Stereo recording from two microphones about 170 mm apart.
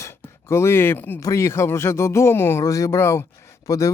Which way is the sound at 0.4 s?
15° left (ahead or behind).